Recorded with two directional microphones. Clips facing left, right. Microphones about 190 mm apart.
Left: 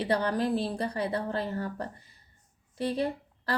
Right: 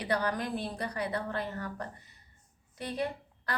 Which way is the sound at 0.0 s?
30° left (ahead or behind).